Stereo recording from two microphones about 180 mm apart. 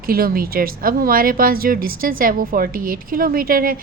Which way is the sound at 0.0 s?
55° right (ahead or behind).